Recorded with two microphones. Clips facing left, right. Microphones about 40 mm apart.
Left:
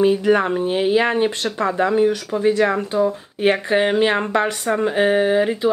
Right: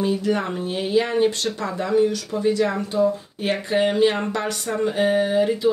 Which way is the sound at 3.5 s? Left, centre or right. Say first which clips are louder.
Left 3 dB; left.